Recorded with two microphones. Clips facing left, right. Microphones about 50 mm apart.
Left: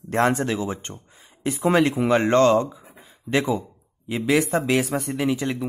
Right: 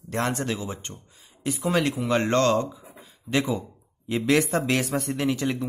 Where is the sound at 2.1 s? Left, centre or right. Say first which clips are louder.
Left 4 dB; centre.